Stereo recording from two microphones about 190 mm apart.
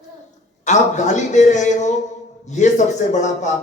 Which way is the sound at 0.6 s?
40° left (ahead or behind).